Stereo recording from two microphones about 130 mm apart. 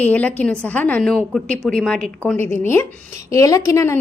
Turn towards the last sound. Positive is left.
turn(degrees=20)  # may be behind; listen again after turning